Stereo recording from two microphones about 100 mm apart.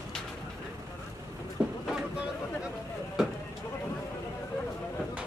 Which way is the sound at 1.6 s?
5° right (ahead or behind).